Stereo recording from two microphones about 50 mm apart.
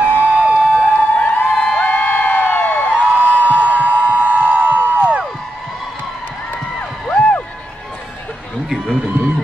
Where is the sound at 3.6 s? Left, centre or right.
Right.